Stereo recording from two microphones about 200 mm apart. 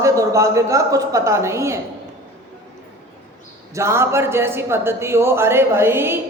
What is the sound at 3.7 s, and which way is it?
A woman's voice, 15° right (ahead or behind).